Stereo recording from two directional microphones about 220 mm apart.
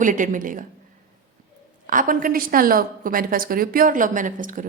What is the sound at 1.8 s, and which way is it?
A woman's voice, 35° right (ahead or behind).